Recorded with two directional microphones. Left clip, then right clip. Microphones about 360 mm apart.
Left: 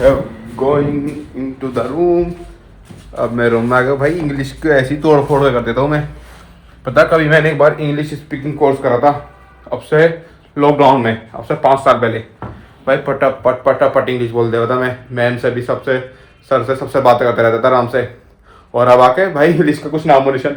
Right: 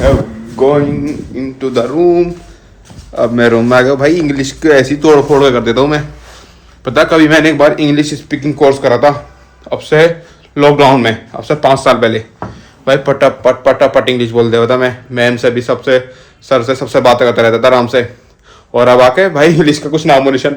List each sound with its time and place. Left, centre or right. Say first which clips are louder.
1.4 s a man's voice: right 6 dB; right